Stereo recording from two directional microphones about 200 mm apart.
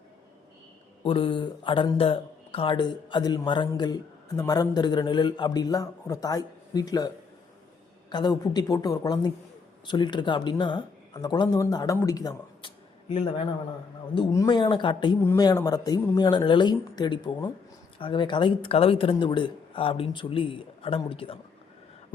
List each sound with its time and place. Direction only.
1.0 s speech: 25° left (ahead or behind)
8.1 s speech: 20° left (ahead or behind)